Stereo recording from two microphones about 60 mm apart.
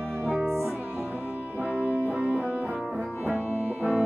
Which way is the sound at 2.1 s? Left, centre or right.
Right.